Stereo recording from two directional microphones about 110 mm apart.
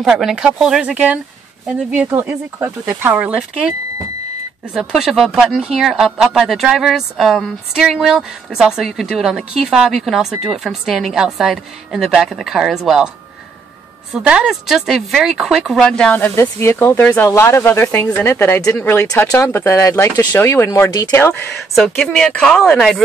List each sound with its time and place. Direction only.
0.0 s speech: 5° right (ahead or behind)
4.7 s speech: 5° right (ahead or behind)
14.1 s speech: 10° right (ahead or behind)
16.2 s speech: 25° left (ahead or behind)
21.7 s speech: 5° left (ahead or behind)